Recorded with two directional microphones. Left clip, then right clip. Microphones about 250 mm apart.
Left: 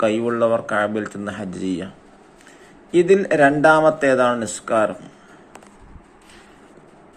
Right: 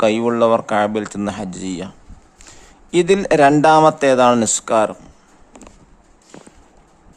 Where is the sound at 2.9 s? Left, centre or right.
Right.